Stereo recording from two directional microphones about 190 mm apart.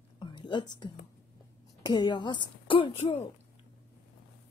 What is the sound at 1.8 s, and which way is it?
A woman's voice, 25° left (ahead or behind).